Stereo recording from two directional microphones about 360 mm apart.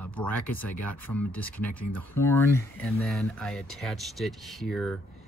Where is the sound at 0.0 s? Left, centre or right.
Centre.